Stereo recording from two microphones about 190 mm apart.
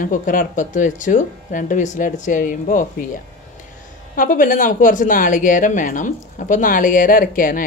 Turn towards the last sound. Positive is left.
turn(degrees=45)  # may be behind; listen again after turning